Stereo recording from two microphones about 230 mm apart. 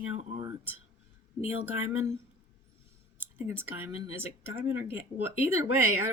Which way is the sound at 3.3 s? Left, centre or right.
Centre.